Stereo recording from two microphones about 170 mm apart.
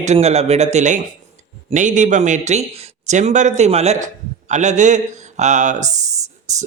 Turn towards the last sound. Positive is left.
turn(degrees=-45)  # may be behind; listen again after turning